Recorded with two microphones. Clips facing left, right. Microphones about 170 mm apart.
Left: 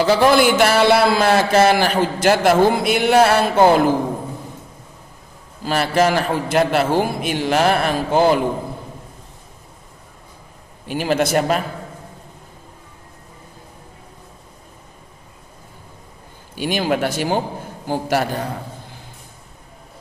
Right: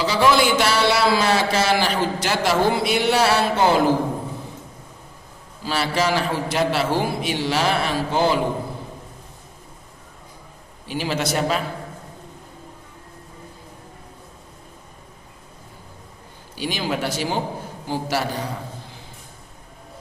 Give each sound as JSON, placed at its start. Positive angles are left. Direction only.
{"t": 0.0, "sound": "speech", "side_deg": 50}
{"t": 5.6, "sound": "speech", "side_deg": 50}
{"t": 10.8, "sound": "speech", "side_deg": 50}
{"t": 16.6, "sound": "speech", "side_deg": 55}